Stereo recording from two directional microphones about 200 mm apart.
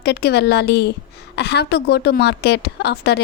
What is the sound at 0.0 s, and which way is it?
A woman's voice, 55° left (ahead or behind).